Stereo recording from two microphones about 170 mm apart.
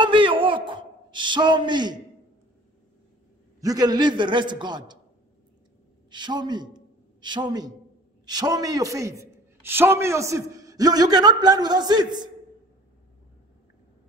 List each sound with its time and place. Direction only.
0.0 s a sound: 30° right (ahead or behind)
3.6 s a man's voice: 25° right (ahead or behind)
6.0 s a man's voice: 25° right (ahead or behind)